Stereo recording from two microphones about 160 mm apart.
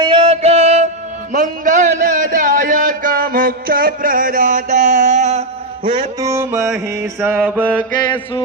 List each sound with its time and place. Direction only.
0.0 s music: 30° right (ahead or behind)
1.3 s a sound: 55° right (ahead or behind)
5.8 s music: 30° right (ahead or behind); by 6.7 s 5° right (ahead or behind)
7.0 s mantra: 15° right (ahead or behind)